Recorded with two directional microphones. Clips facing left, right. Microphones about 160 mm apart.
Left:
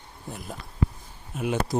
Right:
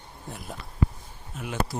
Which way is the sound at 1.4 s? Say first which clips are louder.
Left 4 dB; 20° left (ahead or behind).